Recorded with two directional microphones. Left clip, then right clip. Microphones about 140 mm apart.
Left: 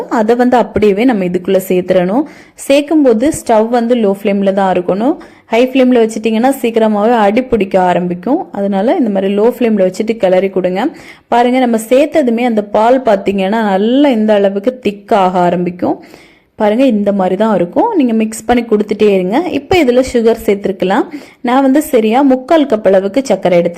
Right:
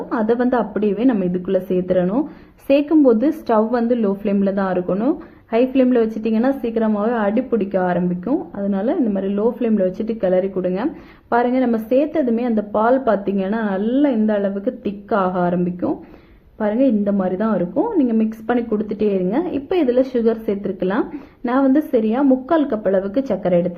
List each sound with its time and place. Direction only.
0.1 s a woman's voice: 35° left (ahead or behind)
2.6 s a woman's voice: 30° left (ahead or behind)